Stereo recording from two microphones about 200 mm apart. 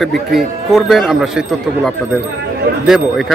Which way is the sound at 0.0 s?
Centre (ahead or behind).